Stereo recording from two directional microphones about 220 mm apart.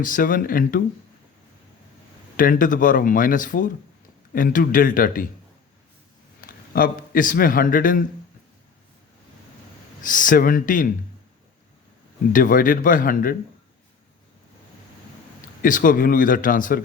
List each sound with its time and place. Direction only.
0.0 s speech: 40° left (ahead or behind)
2.3 s speech: 40° left (ahead or behind)
6.4 s a man's voice: 40° left (ahead or behind)
10.0 s speech: 35° left (ahead or behind)
12.3 s speech: 40° left (ahead or behind)
15.6 s speech: 40° left (ahead or behind)